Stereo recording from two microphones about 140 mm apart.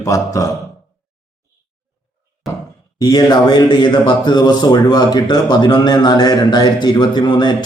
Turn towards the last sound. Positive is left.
turn(degrees=30)  # may be behind; listen again after turning